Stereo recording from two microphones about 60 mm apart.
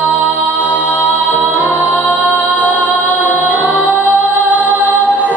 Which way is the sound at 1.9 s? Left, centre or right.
Left.